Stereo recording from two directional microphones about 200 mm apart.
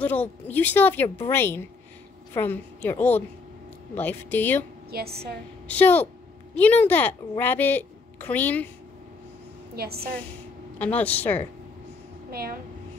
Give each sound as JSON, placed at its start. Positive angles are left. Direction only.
{"t": 0.0, "sound": "a woman's voice", "side_deg": 10}
{"t": 4.9, "sound": "a woman's voice", "side_deg": -50}
{"t": 5.7, "sound": "a woman's voice", "side_deg": 10}
{"t": 9.8, "sound": "a woman's voice", "side_deg": -50}
{"t": 10.8, "sound": "a woman's voice", "side_deg": 5}
{"t": 12.3, "sound": "a woman's voice", "side_deg": -50}